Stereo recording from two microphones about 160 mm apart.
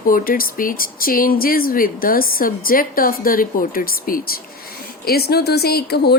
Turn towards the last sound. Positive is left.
turn(degrees=85)